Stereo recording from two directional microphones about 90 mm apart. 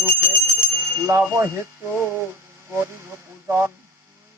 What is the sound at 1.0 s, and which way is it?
A man's voice, 30° right (ahead or behind).